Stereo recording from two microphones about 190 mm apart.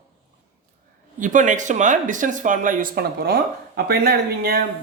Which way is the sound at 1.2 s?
40° right (ahead or behind).